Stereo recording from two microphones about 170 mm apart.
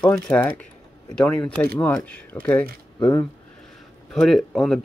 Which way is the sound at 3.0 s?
20° left (ahead or behind).